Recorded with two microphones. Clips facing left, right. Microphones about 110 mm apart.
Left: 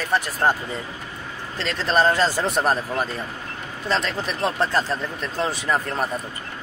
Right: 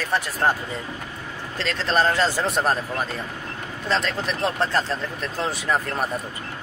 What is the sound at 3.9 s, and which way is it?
Speech, 5° left (ahead or behind).